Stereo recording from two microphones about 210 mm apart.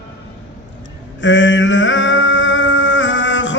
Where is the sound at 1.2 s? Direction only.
60° left (ahead or behind).